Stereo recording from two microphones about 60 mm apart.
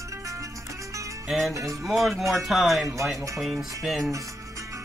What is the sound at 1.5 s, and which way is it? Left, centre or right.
Speech, right.